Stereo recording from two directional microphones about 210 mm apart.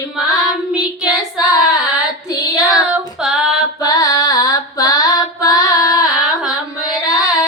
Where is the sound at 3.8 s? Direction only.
15° left (ahead or behind).